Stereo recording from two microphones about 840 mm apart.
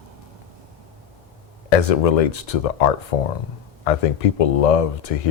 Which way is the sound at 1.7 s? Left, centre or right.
Left.